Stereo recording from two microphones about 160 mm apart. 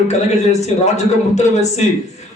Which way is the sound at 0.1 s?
45° left (ahead or behind).